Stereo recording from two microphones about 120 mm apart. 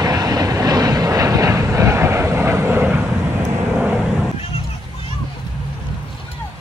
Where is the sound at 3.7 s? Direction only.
5° right (ahead or behind).